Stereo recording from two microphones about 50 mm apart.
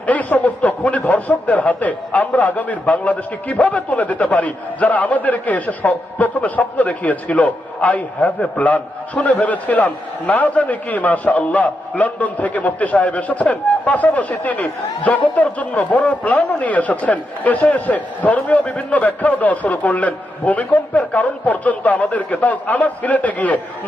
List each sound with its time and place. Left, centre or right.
0.1 s a man's voice: left